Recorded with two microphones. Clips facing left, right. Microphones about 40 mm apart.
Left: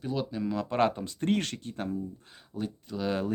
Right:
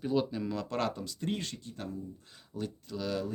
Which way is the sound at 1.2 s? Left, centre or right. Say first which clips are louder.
Left 8 dB; left.